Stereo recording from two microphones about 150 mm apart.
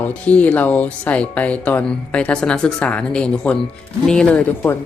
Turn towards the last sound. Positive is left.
turn(degrees=5)  # may be behind; listen again after turning